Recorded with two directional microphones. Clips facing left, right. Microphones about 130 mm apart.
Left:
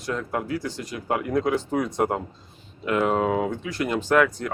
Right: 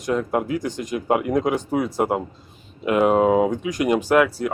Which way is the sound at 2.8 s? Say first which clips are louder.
Right 5 dB; 15° right (ahead or behind).